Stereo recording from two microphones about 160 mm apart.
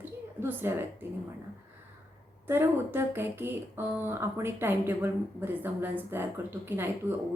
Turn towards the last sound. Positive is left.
turn(degrees=-10)  # may be behind; listen again after turning